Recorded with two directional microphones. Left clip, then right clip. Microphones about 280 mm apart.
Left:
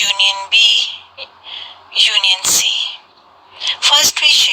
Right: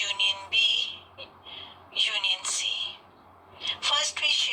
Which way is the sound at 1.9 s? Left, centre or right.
Left.